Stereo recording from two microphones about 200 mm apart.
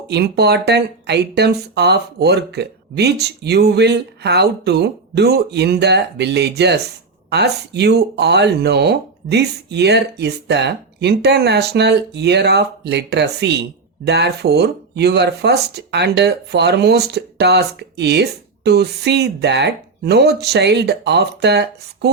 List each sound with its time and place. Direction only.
0.1 s speech: 55° right (ahead or behind)